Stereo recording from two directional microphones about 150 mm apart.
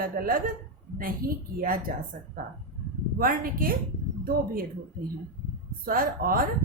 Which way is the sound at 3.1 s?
75° right (ahead or behind).